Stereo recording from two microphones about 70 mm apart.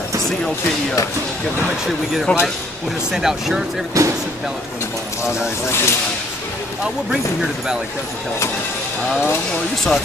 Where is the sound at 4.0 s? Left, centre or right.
Right.